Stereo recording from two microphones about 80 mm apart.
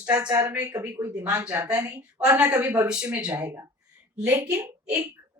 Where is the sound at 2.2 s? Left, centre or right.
Centre.